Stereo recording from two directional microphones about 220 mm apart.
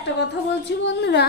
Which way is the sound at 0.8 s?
50° left (ahead or behind).